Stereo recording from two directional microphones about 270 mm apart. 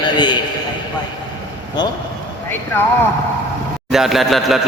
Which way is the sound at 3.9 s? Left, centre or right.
Centre.